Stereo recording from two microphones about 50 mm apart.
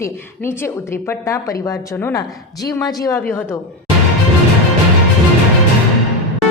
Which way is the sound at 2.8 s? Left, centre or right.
Left.